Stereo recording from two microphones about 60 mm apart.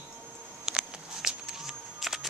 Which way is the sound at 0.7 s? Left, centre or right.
Centre.